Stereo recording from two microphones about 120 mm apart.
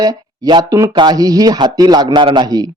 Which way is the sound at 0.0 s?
35° right (ahead or behind).